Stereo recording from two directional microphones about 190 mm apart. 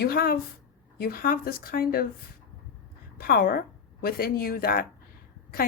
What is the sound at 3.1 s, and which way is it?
A woman's voice, 50° left (ahead or behind).